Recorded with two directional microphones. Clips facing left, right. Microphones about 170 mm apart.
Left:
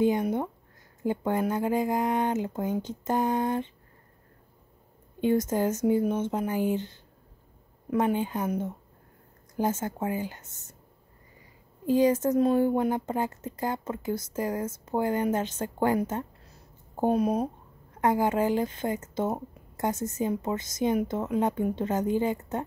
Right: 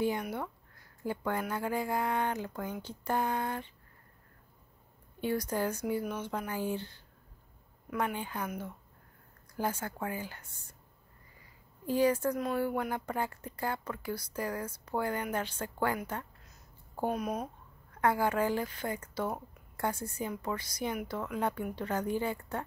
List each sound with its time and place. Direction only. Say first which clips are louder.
0.0 s a woman's voice: left 8 dB; 20° left (ahead or behind)
5.2 s a woman's voice: left 7 dB; 20° left (ahead or behind)
9.6 s a woman's voice: left 6 dB; 20° left (ahead or behind)
11.8 s a woman's voice: left 5 dB; 20° left (ahead or behind)
16.0 s a sound: left 9 dB; 25° left (ahead or behind)
18.0 s a woman's voice: left 4 dB; 20° left (ahead or behind)